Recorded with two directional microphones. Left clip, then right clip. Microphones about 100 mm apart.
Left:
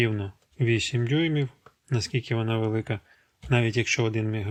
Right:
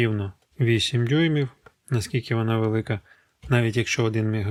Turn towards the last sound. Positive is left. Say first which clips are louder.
# right 3 dB
turn(degrees=-35)  # may be behind; listen again after turning